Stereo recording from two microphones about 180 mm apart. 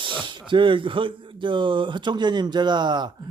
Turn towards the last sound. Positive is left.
turn(degrees=-25)  # may be behind; listen again after turning